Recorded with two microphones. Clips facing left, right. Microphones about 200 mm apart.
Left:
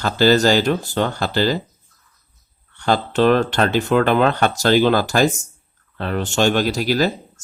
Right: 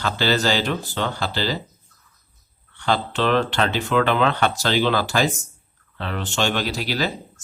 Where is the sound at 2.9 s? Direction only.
45° left (ahead or behind).